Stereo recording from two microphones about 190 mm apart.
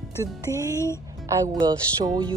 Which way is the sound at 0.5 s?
20° right (ahead or behind).